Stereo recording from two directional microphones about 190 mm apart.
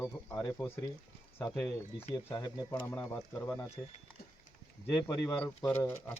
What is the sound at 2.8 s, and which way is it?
Speech, 10° left (ahead or behind).